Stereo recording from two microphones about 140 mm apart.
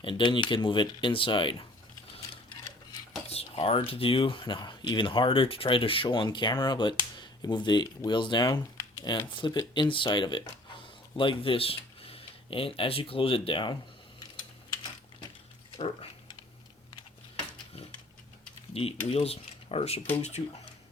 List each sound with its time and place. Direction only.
0.0 s speech: 35° left (ahead or behind)
3.2 s speech: 45° left (ahead or behind)
8.5 s typing: 20° left (ahead or behind)
9.0 s speech: 35° left (ahead or behind)
18.7 s speech: 45° left (ahead or behind)